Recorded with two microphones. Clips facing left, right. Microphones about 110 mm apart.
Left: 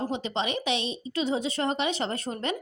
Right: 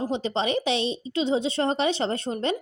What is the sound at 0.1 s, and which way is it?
A woman's voice, 35° right (ahead or behind).